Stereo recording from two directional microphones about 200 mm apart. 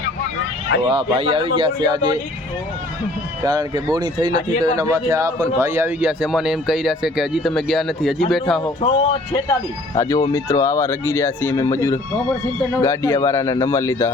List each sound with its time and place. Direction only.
0.9 s speech: 30° right (ahead or behind)
3.4 s a man's voice: 20° right (ahead or behind); by 8.7 s centre (ahead or behind)
8.8 s speech: 25° left (ahead or behind)